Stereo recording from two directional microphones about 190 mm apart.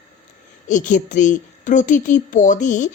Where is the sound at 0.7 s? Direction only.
40° left (ahead or behind).